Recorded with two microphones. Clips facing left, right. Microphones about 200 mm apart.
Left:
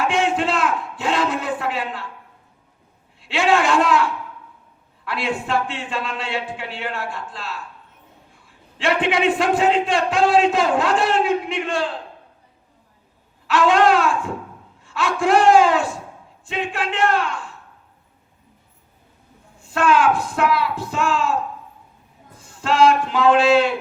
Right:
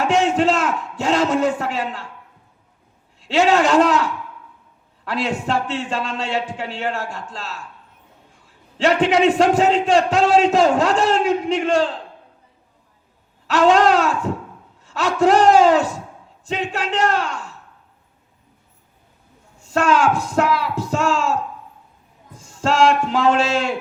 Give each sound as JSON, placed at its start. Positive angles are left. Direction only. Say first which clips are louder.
{"t": 0.0, "sound": "a man's voice", "louder": "right 3 dB", "side_deg": -40}
{"t": 3.2, "sound": "a man's voice", "louder": "right 3 dB", "side_deg": -40}
{"t": 13.5, "sound": "a sound", "louder": "right 2 dB", "side_deg": -40}
{"t": 14.8, "sound": "a man's voice", "louder": "right 3 dB", "side_deg": -40}
{"t": 19.6, "sound": "a man's voice", "louder": "even", "side_deg": -40}
{"t": 22.4, "sound": "a man's voice", "louder": "even", "side_deg": -40}